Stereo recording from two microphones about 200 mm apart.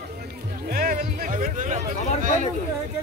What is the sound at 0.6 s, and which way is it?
Speech, 45° right (ahead or behind).